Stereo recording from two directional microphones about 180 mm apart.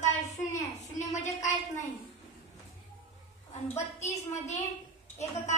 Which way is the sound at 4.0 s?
40° left (ahead or behind).